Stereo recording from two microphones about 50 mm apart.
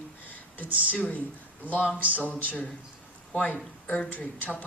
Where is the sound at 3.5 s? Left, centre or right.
Left.